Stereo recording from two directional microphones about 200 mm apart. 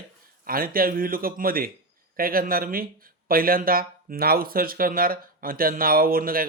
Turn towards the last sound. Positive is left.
turn(degrees=-45)  # may be behind; listen again after turning